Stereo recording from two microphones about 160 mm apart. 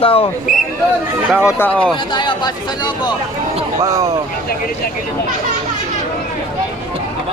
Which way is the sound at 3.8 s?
20° right (ahead or behind).